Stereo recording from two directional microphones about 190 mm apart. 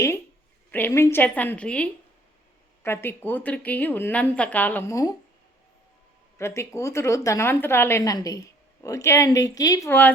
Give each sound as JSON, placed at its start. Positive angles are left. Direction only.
{"t": 0.7, "sound": "a woman's voice", "side_deg": 10}
{"t": 6.4, "sound": "a woman's voice", "side_deg": 15}